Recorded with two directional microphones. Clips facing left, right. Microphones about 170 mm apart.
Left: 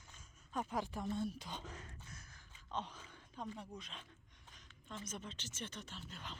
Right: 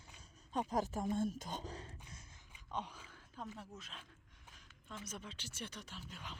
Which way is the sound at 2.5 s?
10° right (ahead or behind).